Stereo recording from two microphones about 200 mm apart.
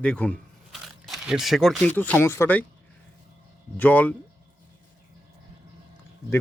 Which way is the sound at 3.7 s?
10° left (ahead or behind).